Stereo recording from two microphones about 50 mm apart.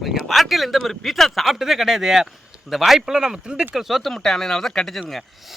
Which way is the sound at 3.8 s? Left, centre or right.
Centre.